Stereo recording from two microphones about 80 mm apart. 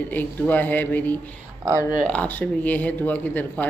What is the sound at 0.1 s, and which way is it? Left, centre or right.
Speech, left.